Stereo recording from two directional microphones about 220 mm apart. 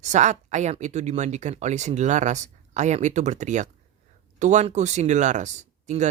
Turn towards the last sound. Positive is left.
turn(degrees=-35)  # may be behind; listen again after turning